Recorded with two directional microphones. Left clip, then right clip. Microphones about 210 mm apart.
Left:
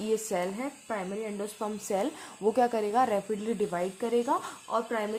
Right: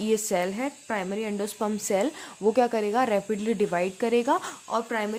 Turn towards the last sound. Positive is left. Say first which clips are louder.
# right 2 dB
turn(degrees=-25)  # may be behind; listen again after turning